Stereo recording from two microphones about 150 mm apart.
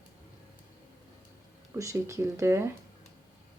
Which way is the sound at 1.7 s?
20° right (ahead or behind).